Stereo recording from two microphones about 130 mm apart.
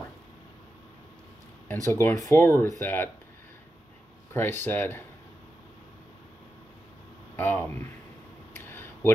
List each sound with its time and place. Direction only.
1.9 s speech: 20° left (ahead or behind)
4.3 s speech: 20° left (ahead or behind)
7.3 s speech: 10° left (ahead or behind)
8.5 s a sound: 15° left (ahead or behind)